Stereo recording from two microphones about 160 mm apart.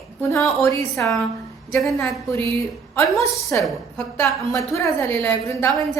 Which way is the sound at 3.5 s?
10° left (ahead or behind).